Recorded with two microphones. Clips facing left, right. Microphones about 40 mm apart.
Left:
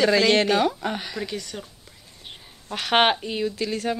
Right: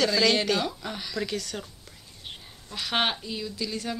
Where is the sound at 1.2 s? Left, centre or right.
Centre.